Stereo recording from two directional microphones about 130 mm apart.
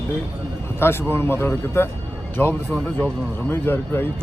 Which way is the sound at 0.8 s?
20° left (ahead or behind).